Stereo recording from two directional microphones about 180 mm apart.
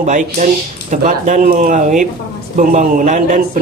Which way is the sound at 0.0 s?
45° right (ahead or behind).